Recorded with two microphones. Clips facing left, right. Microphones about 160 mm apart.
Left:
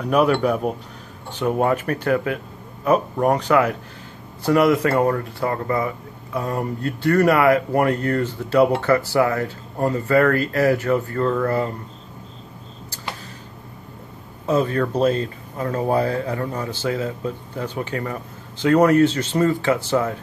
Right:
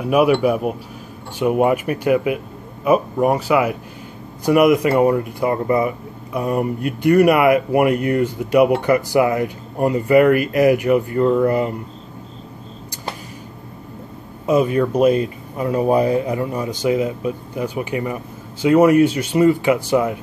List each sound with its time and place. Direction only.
0.0 s speech: 10° right (ahead or behind)
14.4 s speech: 10° right (ahead or behind)